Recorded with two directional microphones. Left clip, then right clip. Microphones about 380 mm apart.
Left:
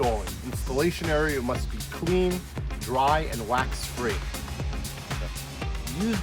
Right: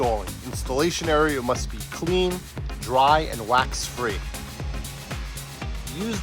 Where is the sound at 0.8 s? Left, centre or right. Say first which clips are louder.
Right 4 dB; centre.